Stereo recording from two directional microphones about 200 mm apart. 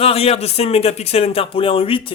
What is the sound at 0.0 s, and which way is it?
Speech, 30° left (ahead or behind).